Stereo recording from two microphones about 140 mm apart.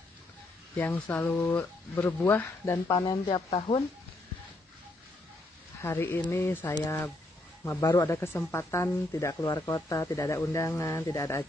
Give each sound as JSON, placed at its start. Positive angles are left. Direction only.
{"t": 0.7, "sound": "speech", "side_deg": 10}
{"t": 2.9, "sound": "speech", "side_deg": 30}
{"t": 5.8, "sound": "speech", "side_deg": 15}